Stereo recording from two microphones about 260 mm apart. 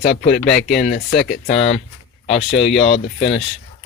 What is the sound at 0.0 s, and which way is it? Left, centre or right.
Speech, left.